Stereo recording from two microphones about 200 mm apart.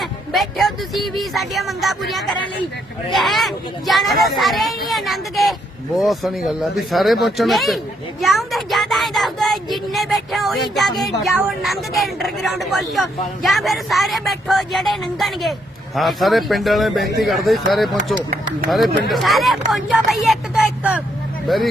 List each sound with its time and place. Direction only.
0.0 s speech: centre (ahead or behind)